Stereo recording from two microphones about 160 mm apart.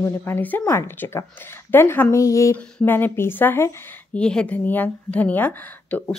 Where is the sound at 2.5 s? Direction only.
5° left (ahead or behind).